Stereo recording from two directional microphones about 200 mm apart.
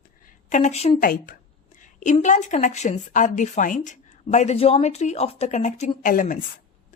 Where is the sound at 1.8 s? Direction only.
40° left (ahead or behind).